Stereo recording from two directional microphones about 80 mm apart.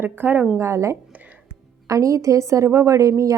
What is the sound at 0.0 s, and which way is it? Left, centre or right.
Speech, right.